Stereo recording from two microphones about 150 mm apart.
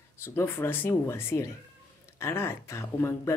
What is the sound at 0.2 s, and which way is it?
Speech, 15° left (ahead or behind).